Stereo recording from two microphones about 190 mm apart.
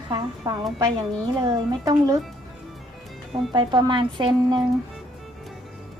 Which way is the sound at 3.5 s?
25° right (ahead or behind).